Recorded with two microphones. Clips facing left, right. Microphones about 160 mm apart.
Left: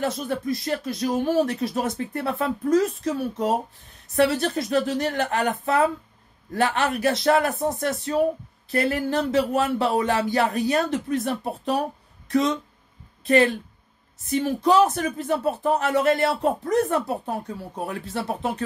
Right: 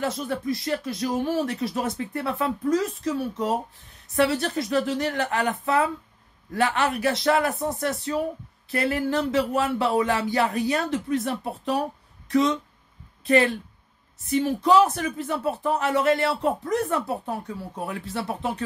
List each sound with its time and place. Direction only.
0.0 s speech: 45° left (ahead or behind)
14.3 s speech: 45° left (ahead or behind)